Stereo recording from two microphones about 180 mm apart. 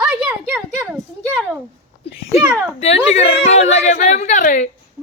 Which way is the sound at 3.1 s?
35° left (ahead or behind).